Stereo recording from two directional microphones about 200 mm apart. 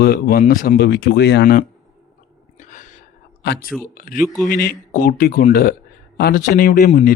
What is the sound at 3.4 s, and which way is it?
Speech, 55° left (ahead or behind).